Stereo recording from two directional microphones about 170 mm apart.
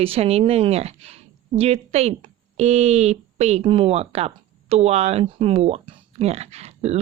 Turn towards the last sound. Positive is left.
turn(degrees=-40)  # may be behind; listen again after turning